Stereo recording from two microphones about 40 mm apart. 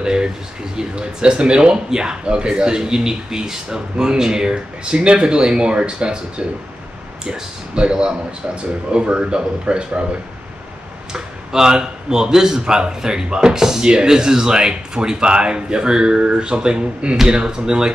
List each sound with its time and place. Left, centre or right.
0.0 s speech: right
11.1 s speech: centre